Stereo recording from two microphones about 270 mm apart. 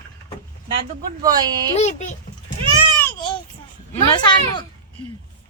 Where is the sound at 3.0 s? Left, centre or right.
Centre.